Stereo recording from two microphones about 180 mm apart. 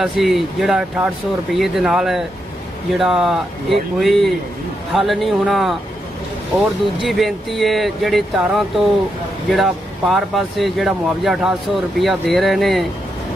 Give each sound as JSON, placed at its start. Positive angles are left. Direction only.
{"t": 0.0, "sound": "speech", "side_deg": 0}
{"t": 7.0, "sound": "speech", "side_deg": 0}